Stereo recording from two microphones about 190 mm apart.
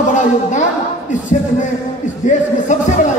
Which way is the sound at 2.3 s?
40° left (ahead or behind).